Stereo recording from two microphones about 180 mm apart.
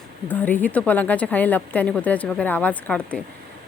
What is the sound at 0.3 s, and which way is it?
Speech, 10° left (ahead or behind).